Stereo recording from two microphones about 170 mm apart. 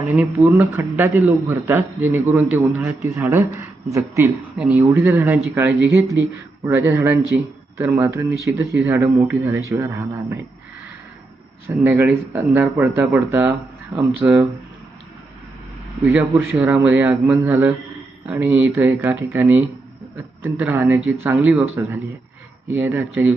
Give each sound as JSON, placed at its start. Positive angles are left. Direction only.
{"t": 0.2, "sound": "a man's voice", "side_deg": -10}
{"t": 11.8, "sound": "a man's voice", "side_deg": -10}
{"t": 16.3, "sound": "a man's voice", "side_deg": -15}